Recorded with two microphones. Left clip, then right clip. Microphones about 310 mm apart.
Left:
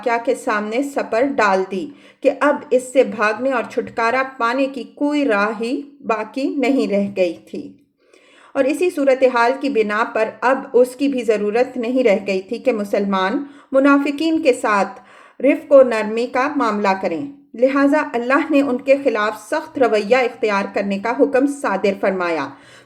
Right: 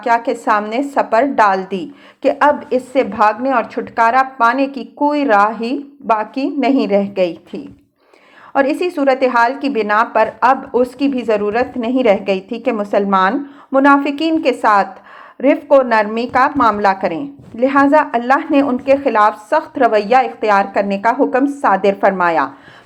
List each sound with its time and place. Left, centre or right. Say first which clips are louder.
0.0 s a woman's voice: right 3 dB; centre